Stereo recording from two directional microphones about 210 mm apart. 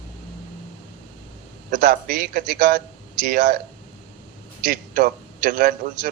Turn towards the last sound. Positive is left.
turn(degrees=-45)  # may be behind; listen again after turning